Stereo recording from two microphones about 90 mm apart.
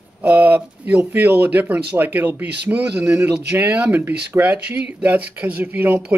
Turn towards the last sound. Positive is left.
turn(degrees=-25)  # may be behind; listen again after turning